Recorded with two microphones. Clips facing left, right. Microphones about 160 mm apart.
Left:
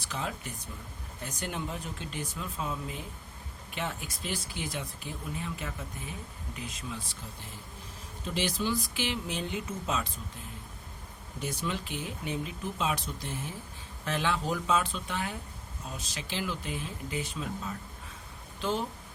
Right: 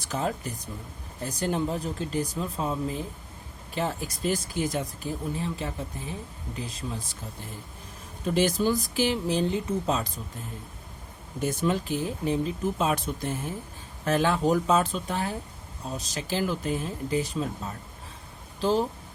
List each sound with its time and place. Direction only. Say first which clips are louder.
0.1 s speech: right 7 dB; 40° right (ahead or behind)
8.3 s speech: right 7 dB; 45° right (ahead or behind)
11.3 s speech: right 8 dB; 45° right (ahead or behind)
18.6 s speech: right 7 dB; 35° right (ahead or behind)